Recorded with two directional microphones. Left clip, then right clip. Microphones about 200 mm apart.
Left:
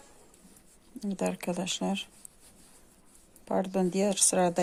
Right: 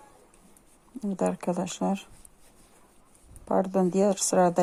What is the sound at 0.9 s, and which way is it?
Speech, 20° right (ahead or behind).